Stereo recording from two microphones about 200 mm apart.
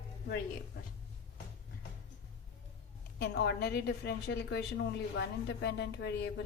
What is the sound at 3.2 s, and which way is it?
A woman's voice, 55° left (ahead or behind).